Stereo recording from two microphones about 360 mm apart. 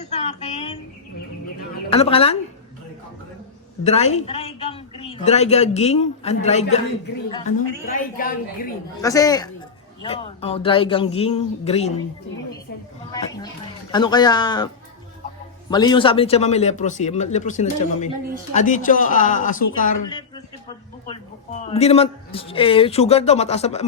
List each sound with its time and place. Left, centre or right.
0.0 s a sound: centre
1.9 s speech: centre
3.8 s a woman's voice: centre
7.9 s a man's voice: left
9.0 s speech: centre
13.1 s a sound: centre
13.9 s speech: centre
15.7 s a man's voice: centre
20.1 s a sound: centre
21.1 s a woman's voice: centre